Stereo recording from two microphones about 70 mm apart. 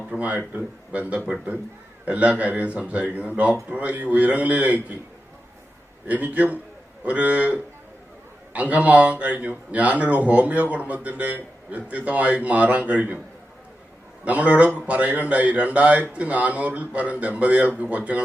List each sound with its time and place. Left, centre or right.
0.2 s speech: right
6.1 s speech: right
14.3 s speech: right